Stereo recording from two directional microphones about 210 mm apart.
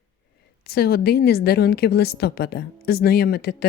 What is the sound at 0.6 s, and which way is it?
Speech, 50° left (ahead or behind).